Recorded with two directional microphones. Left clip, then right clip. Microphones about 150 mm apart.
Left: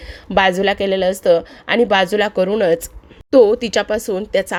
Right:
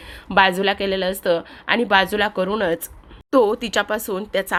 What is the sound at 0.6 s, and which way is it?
A woman's voice, 25° left (ahead or behind).